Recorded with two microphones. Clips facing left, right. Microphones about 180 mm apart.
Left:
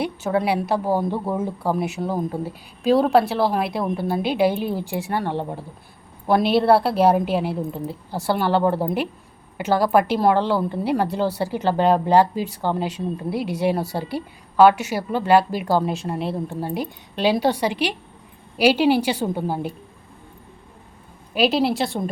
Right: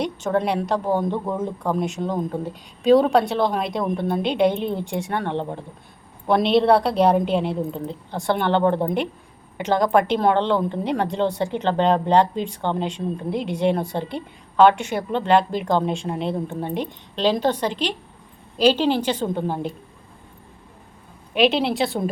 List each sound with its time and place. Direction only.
0.0 s a woman's voice: 5° left (ahead or behind)
21.3 s a woman's voice: centre (ahead or behind)